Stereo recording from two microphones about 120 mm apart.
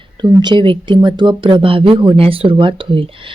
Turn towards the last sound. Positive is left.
turn(degrees=-45)  # may be behind; listen again after turning